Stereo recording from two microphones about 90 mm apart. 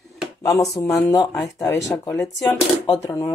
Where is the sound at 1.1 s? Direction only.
35° left (ahead or behind).